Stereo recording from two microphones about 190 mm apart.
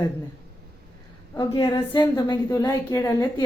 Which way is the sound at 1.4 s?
20° left (ahead or behind).